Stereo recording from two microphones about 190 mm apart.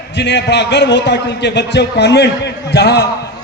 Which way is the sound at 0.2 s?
65° left (ahead or behind).